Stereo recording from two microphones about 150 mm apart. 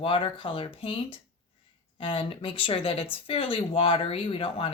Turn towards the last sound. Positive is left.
turn(degrees=40)  # may be behind; listen again after turning